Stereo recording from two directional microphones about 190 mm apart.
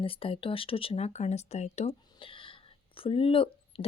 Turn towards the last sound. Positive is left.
turn(degrees=30)  # may be behind; listen again after turning